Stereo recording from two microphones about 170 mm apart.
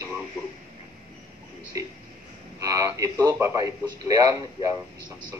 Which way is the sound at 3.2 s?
15° right (ahead or behind).